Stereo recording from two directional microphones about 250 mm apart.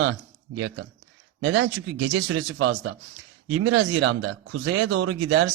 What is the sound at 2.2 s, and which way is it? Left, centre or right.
Speech, right.